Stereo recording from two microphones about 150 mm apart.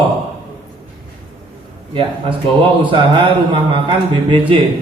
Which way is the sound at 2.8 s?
35° right (ahead or behind).